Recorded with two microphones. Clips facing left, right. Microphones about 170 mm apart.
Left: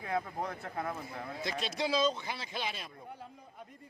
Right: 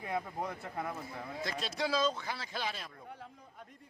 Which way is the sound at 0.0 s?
10° right (ahead or behind).